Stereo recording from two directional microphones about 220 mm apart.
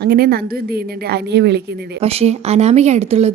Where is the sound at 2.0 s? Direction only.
25° right (ahead or behind).